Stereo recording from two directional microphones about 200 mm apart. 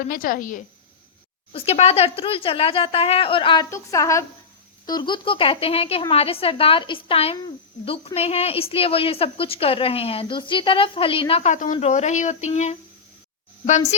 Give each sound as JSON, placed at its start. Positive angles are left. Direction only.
{"t": 0.1, "sound": "a woman's voice", "side_deg": 45}
{"t": 1.5, "sound": "a woman's voice", "side_deg": 30}